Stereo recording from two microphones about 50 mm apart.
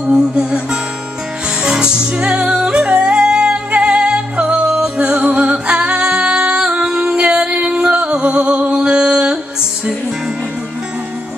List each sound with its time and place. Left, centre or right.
0.0 s music: centre
2.4 s music: right
5.2 s singing: right
6.9 s music: centre
7.2 s music: centre